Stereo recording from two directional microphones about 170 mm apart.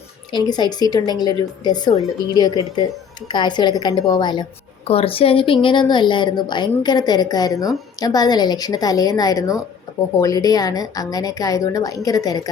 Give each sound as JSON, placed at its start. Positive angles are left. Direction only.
{"t": 0.3, "sound": "a woman's voice", "side_deg": 25}